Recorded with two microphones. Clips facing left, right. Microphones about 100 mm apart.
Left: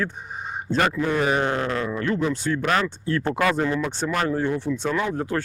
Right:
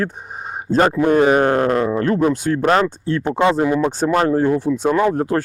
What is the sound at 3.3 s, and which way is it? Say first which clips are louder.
Speech: right 8 dB; 25° right (ahead or behind).